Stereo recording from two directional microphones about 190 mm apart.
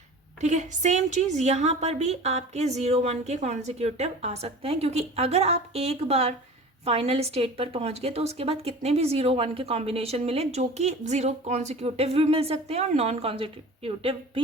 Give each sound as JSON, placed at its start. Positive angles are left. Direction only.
{"t": 0.4, "sound": "a woman's voice", "side_deg": -40}